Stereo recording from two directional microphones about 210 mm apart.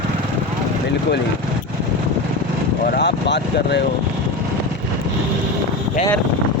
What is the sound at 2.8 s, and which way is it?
Speech, 50° left (ahead or behind).